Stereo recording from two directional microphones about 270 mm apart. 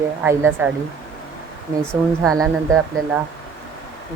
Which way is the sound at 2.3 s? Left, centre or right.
Centre.